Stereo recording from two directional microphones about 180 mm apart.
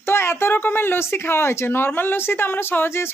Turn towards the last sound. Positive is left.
turn(degrees=15)  # may be behind; listen again after turning